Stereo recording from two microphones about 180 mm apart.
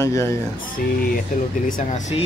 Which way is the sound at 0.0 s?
15° left (ahead or behind).